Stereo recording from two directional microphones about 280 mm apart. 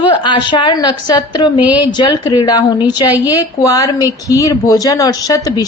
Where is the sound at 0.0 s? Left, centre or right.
Centre.